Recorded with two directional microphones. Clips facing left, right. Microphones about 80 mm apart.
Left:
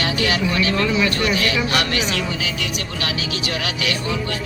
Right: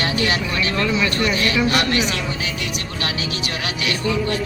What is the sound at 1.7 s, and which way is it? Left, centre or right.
Speech, right.